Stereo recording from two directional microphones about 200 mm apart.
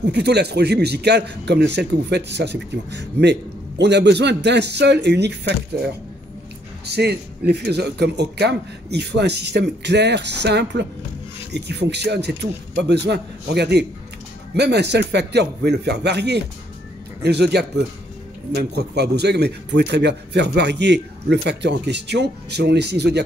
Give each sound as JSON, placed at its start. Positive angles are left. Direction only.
{"t": 0.0, "sound": "a man's voice", "side_deg": -55}
{"t": 6.9, "sound": "a man's voice", "side_deg": -55}